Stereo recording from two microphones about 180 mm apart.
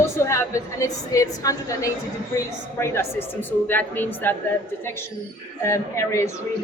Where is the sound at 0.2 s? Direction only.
15° left (ahead or behind).